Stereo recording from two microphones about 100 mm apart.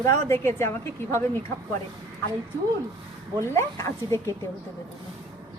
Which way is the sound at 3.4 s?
25° left (ahead or behind).